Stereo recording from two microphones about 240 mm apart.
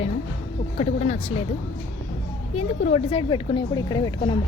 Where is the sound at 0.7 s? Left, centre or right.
Left.